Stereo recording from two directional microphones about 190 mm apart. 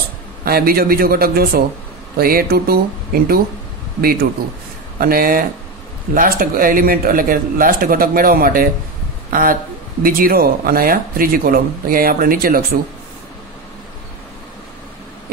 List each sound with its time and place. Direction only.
0.5 s speech: 55° right (ahead or behind)